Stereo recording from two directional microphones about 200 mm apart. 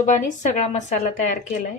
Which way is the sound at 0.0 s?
40° left (ahead or behind).